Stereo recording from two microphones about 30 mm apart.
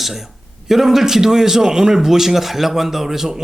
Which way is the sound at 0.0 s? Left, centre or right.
Centre.